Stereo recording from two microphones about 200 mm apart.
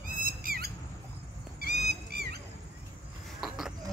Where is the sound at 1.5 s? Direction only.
55° right (ahead or behind).